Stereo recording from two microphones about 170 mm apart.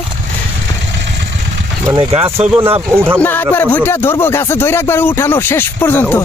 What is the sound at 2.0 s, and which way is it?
Speech, 35° right (ahead or behind).